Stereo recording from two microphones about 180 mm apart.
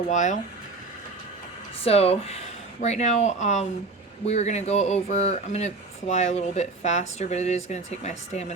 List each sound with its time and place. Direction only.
0.1 s speech: 40° left (ahead or behind)
1.8 s speech: 35° left (ahead or behind)